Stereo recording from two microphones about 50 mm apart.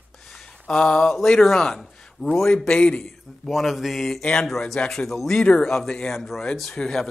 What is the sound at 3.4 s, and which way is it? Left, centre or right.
Speech, centre.